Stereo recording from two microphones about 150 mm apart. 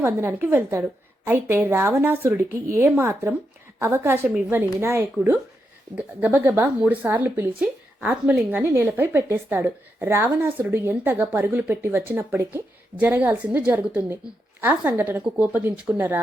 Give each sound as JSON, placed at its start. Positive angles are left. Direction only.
{"t": 0.0, "sound": "speech", "side_deg": -15}